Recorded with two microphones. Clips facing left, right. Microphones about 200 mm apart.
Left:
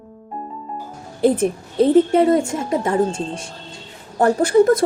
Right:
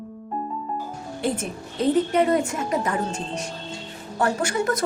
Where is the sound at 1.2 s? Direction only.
30° left (ahead or behind).